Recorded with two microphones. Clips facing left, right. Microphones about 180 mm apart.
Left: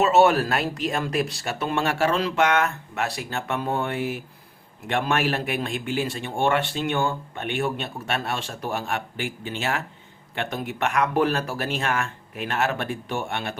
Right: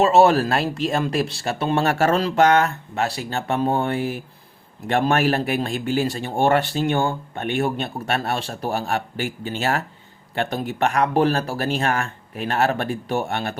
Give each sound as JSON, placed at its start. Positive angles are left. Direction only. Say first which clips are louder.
{"t": 0.0, "sound": "speech", "louder": "right 3 dB", "side_deg": -30}